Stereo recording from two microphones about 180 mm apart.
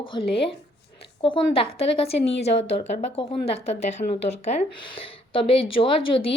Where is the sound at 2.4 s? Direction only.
35° left (ahead or behind).